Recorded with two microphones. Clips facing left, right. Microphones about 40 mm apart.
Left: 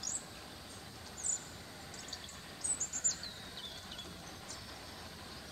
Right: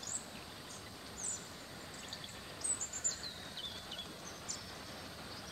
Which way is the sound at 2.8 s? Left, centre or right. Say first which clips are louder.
Left 2 dB; right.